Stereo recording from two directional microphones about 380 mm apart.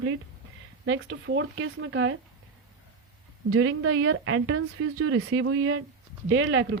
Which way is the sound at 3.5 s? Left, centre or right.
Right.